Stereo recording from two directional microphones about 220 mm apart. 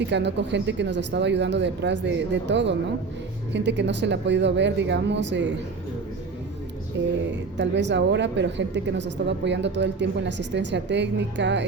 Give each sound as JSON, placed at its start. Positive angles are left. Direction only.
{"t": 0.1, "sound": "speech", "side_deg": -55}
{"t": 7.3, "sound": "speech", "side_deg": -55}